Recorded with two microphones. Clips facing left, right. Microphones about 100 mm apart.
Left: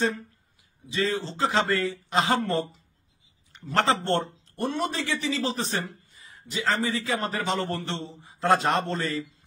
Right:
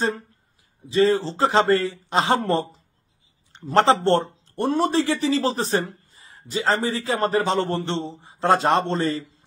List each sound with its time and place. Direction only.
0.8 s speech: 35° right (ahead or behind)